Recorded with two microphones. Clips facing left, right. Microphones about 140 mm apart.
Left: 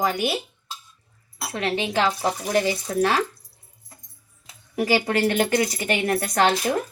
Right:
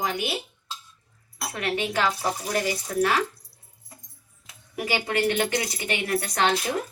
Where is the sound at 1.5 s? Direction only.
25° left (ahead or behind).